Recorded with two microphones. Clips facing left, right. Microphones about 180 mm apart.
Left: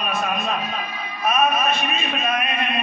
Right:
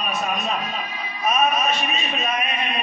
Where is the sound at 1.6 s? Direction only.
55° left (ahead or behind).